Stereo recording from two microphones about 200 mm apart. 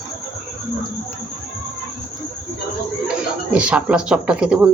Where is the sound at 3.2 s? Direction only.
5° right (ahead or behind).